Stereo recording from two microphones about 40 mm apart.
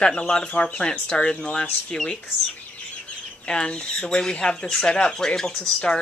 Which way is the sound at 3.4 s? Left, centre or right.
Left.